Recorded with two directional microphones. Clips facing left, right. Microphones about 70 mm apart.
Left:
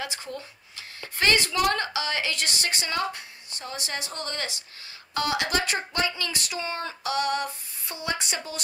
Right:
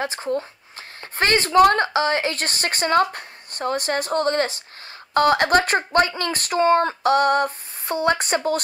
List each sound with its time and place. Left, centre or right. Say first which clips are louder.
0.0 s speech: right 10 dB; right